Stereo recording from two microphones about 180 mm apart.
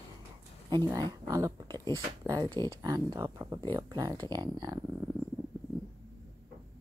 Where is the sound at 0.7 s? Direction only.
25° right (ahead or behind).